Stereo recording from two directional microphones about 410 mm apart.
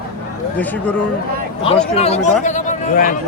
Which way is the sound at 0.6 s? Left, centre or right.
Centre.